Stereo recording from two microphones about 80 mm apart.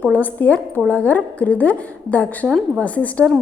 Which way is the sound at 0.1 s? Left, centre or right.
Left.